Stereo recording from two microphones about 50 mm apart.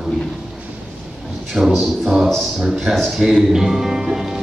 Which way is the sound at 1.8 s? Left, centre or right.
Centre.